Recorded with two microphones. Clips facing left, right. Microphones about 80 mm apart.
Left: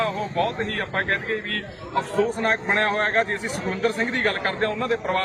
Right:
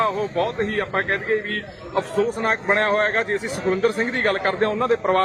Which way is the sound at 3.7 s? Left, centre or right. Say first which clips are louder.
Right 4 dB; right.